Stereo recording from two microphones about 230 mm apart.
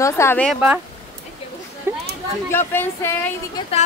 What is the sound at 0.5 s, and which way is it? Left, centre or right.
Speech, centre.